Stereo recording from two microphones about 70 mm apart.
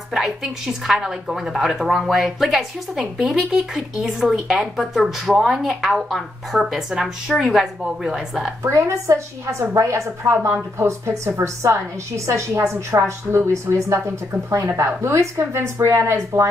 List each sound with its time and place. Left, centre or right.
0.1 s a woman's voice: centre
8.6 s a woman's voice: right